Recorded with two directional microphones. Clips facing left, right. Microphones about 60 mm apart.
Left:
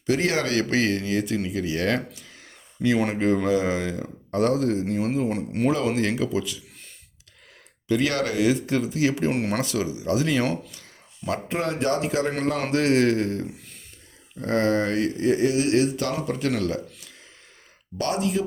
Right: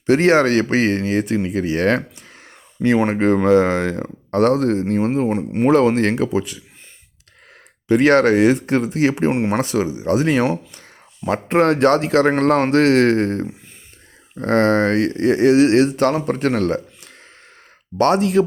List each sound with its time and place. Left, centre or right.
0.0 s speech: right
5.7 s speech: right
6.2 s speech: right
7.9 s speech: right
9.3 s speech: right
11.5 s speech: right
17.9 s speech: right